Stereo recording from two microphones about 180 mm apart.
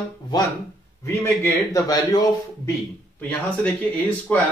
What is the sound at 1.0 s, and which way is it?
A man's voice, 15° left (ahead or behind).